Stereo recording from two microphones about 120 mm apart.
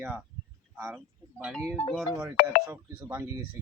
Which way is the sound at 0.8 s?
15° right (ahead or behind).